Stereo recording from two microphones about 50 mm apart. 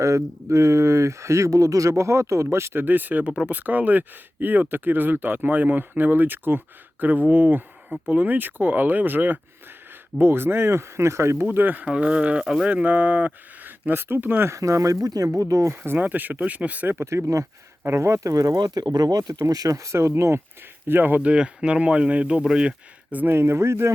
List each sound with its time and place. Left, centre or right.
0.0 s speech: right
2.8 s speech: right
11.4 s speech: right
11.9 s speech: right
14.4 s speech: right
15.7 s speech: right
17.0 s speech: right
17.8 s speech: right
20.8 s speech: right
21.2 s speech: right
23.3 s speech: right